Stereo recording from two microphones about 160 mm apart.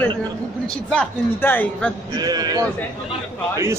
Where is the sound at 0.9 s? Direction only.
10° left (ahead or behind).